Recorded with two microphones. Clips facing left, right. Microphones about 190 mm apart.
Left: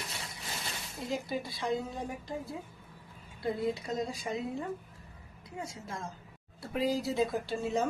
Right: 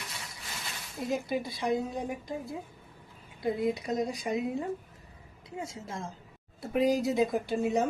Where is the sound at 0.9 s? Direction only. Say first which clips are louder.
Right 4 dB; 20° right (ahead or behind).